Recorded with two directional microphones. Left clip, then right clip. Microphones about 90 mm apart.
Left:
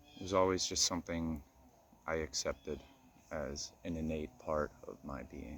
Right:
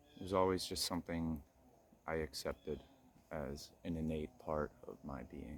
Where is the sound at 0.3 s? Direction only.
35° right (ahead or behind).